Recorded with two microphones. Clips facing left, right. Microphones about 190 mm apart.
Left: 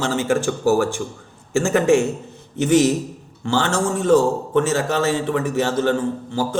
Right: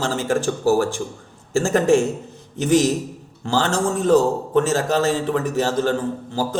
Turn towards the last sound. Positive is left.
turn(degrees=-40)  # may be behind; listen again after turning